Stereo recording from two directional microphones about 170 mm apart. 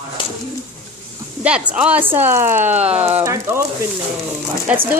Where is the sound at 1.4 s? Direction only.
5° right (ahead or behind).